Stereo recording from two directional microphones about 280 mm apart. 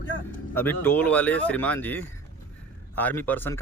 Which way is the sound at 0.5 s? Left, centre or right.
Centre.